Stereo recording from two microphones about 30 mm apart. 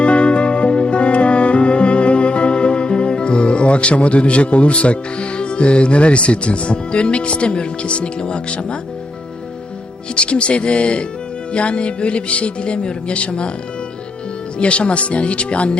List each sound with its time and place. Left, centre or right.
0.0 s music: left
10.2 s music: left
14.6 s speech: left